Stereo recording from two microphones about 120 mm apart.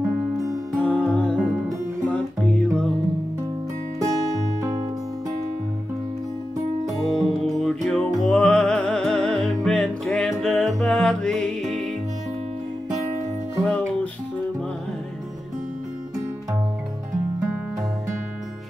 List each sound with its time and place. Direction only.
0.7 s music: 10° left (ahead or behind)
2.5 s music: 5° left (ahead or behind)
6.9 s music: centre (ahead or behind)
13.6 s music: 10° left (ahead or behind)